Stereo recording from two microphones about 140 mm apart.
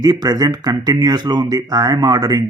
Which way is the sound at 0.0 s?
25° right (ahead or behind).